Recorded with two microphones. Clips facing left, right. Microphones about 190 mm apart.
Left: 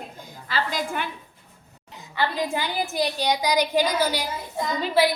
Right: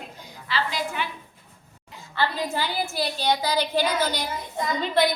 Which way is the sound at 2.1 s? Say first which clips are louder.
Left 1 dB; 15° left (ahead or behind).